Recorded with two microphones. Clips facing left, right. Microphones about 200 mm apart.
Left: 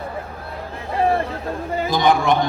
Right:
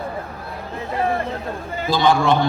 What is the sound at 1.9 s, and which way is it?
Speech, 15° left (ahead or behind).